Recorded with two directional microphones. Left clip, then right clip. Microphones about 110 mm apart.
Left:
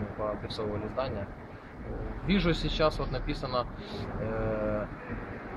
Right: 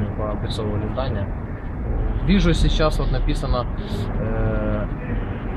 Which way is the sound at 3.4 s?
5° right (ahead or behind).